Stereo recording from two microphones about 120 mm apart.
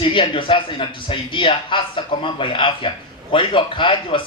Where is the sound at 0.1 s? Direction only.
45° left (ahead or behind).